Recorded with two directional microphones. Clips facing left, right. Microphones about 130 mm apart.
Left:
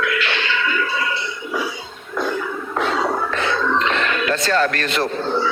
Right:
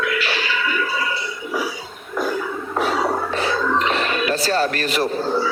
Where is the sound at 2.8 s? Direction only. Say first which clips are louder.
Even; 35° right (ahead or behind).